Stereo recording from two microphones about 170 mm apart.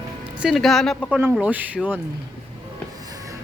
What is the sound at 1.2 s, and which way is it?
Speech, 10° right (ahead or behind).